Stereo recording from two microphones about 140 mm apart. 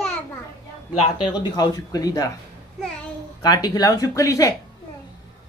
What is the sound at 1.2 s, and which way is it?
Speech, 30° left (ahead or behind).